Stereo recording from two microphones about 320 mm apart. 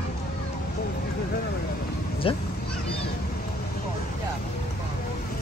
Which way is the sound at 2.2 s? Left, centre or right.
Centre.